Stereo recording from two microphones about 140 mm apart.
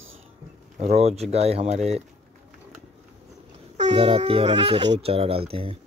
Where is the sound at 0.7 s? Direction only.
50° right (ahead or behind).